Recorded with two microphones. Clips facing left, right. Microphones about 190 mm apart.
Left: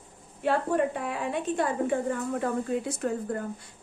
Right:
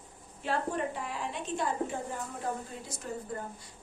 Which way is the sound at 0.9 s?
60° left (ahead or behind).